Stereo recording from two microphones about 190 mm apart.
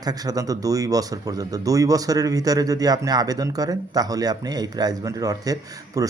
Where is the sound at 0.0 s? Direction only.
20° right (ahead or behind).